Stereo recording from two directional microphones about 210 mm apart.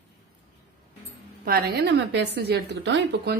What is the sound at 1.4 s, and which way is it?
A woman's voice, 50° right (ahead or behind).